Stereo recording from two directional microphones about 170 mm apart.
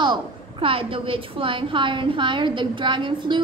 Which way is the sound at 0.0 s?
30° right (ahead or behind).